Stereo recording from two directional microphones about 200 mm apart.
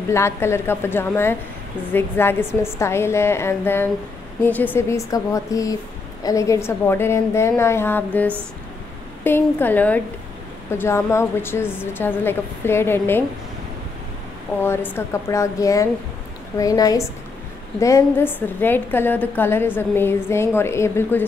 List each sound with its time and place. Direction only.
0.1 s a woman's voice: 15° left (ahead or behind)
14.6 s a woman's voice: 10° left (ahead or behind)